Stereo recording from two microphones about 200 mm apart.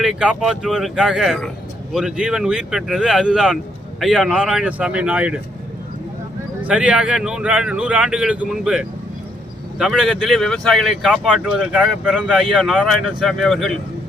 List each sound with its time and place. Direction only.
0.0 s speech: 5° right (ahead or behind)
6.7 s speech: 5° right (ahead or behind)